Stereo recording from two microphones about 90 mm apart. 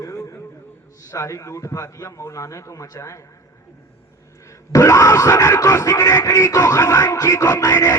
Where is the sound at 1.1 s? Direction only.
35° left (ahead or behind).